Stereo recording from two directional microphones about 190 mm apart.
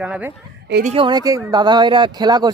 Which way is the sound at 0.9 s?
25° right (ahead or behind).